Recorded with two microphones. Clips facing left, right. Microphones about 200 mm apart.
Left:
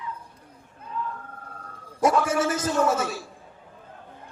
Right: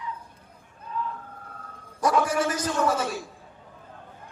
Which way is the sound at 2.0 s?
25° left (ahead or behind).